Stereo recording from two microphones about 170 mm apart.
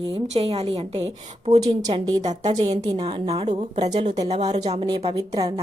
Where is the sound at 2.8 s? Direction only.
30° right (ahead or behind).